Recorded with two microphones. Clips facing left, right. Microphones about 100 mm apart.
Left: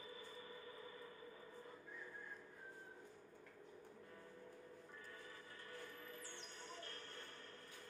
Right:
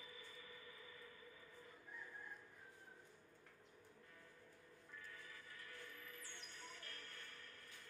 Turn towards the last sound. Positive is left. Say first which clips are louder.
# left 4 dB
turn(degrees=30)  # may be behind; listen again after turning